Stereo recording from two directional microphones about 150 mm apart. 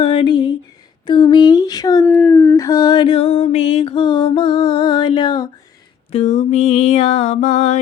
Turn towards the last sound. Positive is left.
turn(degrees=50)  # may be behind; listen again after turning